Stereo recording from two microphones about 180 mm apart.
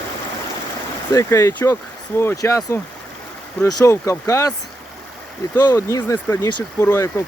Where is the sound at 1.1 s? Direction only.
15° left (ahead or behind).